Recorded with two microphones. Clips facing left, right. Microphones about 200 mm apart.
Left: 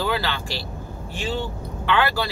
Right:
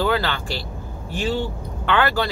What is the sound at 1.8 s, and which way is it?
Speech, 50° right (ahead or behind).